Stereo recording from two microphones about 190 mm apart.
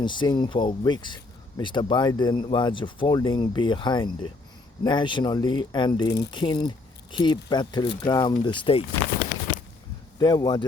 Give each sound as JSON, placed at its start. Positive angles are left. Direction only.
{"t": 0.0, "sound": "speech", "side_deg": 25}
{"t": 10.2, "sound": "speech", "side_deg": 20}